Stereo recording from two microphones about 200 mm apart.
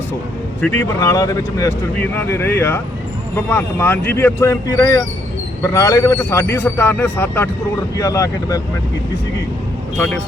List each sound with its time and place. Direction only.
0.6 s speech: 10° left (ahead or behind)